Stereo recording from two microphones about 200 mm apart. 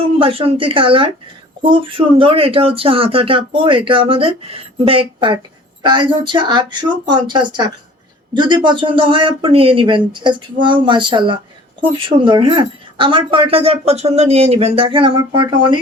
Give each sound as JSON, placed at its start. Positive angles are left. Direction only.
{"t": 0.2, "sound": "speech", "side_deg": -30}